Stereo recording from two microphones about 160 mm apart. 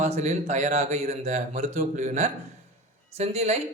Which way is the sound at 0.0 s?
45° right (ahead or behind).